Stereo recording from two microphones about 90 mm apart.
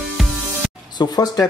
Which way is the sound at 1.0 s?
45° left (ahead or behind).